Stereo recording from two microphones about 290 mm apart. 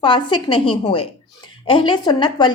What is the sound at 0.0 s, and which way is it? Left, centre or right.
Speech, centre.